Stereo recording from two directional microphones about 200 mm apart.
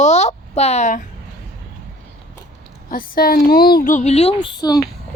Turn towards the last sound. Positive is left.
turn(degrees=20)  # may be behind; listen again after turning